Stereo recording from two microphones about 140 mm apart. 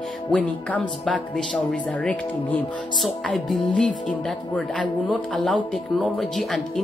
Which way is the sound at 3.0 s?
Centre (ahead or behind).